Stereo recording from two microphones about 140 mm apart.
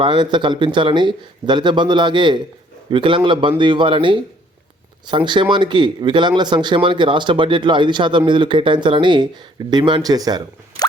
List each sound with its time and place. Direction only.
0.0 s speech: 35° right (ahead or behind)